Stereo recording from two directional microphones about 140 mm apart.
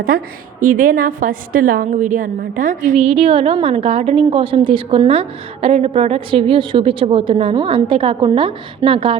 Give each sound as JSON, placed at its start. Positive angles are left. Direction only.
{"t": 0.6, "sound": "a woman's voice", "side_deg": -80}
{"t": 3.0, "sound": "a woman's voice", "side_deg": -45}